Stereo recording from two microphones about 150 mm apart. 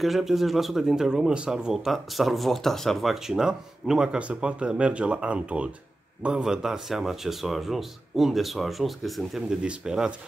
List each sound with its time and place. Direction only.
0.0 s speech: centre (ahead or behind)